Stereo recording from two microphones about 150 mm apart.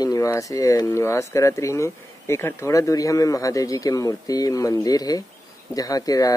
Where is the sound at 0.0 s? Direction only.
25° left (ahead or behind).